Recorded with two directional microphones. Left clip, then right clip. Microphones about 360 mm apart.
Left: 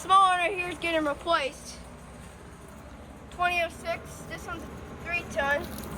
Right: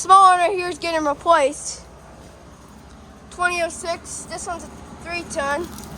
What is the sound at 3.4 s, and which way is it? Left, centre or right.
Speech, centre.